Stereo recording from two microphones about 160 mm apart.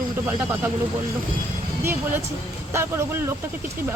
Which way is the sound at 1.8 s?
15° right (ahead or behind).